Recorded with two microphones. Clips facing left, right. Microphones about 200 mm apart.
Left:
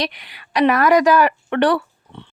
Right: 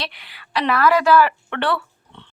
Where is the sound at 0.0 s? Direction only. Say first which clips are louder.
Left 7 dB; 15° left (ahead or behind).